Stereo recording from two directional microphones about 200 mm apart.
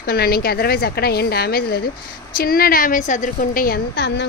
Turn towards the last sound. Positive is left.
turn(degrees=55)  # may be behind; listen again after turning